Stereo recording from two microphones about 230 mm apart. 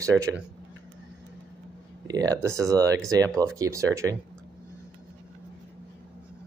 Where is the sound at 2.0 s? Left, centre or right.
Centre.